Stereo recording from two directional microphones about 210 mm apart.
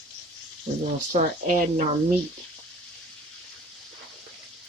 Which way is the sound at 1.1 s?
35° right (ahead or behind).